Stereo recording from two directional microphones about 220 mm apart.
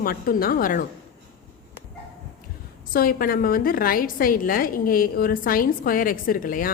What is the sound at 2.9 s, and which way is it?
A woman's voice, 40° left (ahead or behind).